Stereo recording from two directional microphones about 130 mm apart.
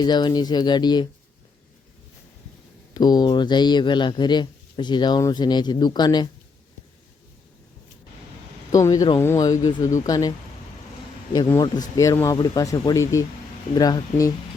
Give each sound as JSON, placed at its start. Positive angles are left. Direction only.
{"t": 0.0, "sound": "speech", "side_deg": 35}
{"t": 2.9, "sound": "speech", "side_deg": 30}
{"t": 8.7, "sound": "speech", "side_deg": 25}
{"t": 11.9, "sound": "speech", "side_deg": 25}